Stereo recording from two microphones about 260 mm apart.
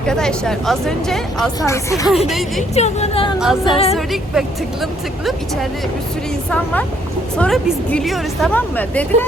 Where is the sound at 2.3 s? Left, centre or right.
Centre.